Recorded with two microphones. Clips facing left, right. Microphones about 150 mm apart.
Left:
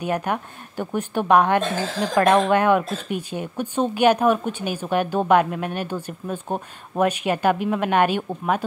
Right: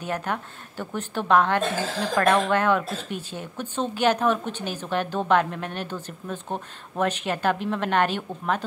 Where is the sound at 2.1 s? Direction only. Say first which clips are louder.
Left 4 dB; 25° left (ahead or behind).